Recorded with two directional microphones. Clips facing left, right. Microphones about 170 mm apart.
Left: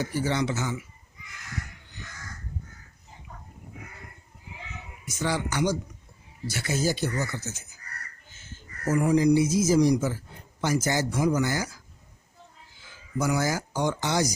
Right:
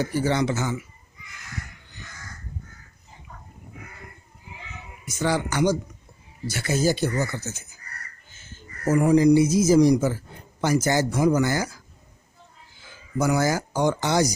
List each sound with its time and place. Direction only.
0.0 s a man's voice: 45° right (ahead or behind)
5.2 s a man's voice: 50° right (ahead or behind)
8.8 s a man's voice: 50° right (ahead or behind)
13.1 s a man's voice: 55° right (ahead or behind)